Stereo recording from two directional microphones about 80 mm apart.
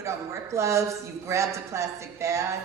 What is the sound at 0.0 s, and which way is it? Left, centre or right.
A man's voice, right.